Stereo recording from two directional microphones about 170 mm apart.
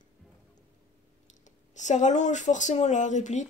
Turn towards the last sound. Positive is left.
turn(degrees=45)  # may be behind; listen again after turning